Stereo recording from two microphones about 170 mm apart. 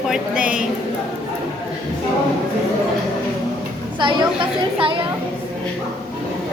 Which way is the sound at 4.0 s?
30° right (ahead or behind).